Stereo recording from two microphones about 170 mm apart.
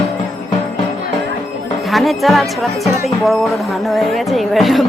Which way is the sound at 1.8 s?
Centre (ahead or behind).